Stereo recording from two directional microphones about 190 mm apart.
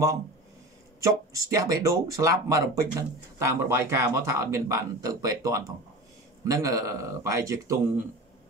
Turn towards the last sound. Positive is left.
turn(degrees=-15)  # may be behind; listen again after turning